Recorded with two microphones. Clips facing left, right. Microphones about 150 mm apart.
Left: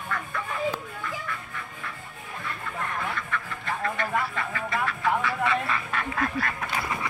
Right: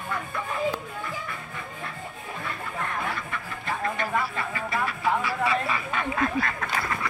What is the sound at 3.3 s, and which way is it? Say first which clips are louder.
Music: even; 15° right (ahead or behind).